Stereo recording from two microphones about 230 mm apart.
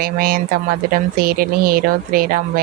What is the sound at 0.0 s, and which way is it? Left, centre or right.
Speech, right.